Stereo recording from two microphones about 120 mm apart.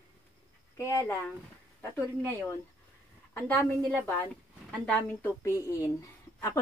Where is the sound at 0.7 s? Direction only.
25° left (ahead or behind).